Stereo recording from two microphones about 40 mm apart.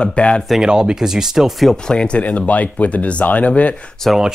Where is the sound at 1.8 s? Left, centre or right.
Left.